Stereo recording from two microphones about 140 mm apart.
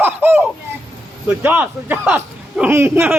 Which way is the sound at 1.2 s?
10° right (ahead or behind).